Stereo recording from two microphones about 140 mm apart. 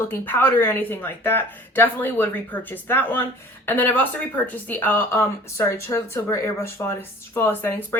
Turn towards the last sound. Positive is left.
turn(degrees=15)  # may be behind; listen again after turning